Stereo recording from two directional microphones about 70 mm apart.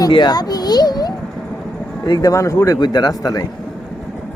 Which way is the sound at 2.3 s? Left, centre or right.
Left.